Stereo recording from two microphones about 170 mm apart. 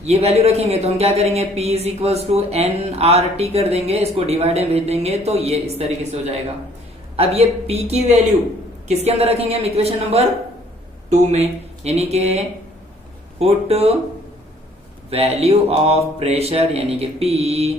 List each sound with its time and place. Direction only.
0.0 s speech: 40° right (ahead or behind)
7.2 s speech: 35° right (ahead or behind)
13.4 s speech: 35° right (ahead or behind)
15.1 s speech: 35° right (ahead or behind)